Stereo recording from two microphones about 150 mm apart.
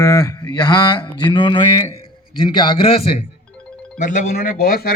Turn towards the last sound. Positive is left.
turn(degrees=90)